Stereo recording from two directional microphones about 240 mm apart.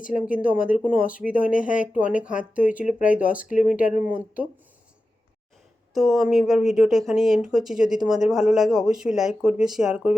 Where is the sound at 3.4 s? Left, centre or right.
Left.